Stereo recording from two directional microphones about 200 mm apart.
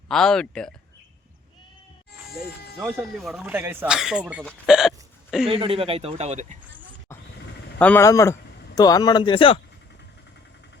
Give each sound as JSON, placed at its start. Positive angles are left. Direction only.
{"t": 0.1, "sound": "speech", "side_deg": 0}
{"t": 2.7, "sound": "speech", "side_deg": -10}
{"t": 5.5, "sound": "speech", "side_deg": -30}
{"t": 7.8, "sound": "a man's voice", "side_deg": 10}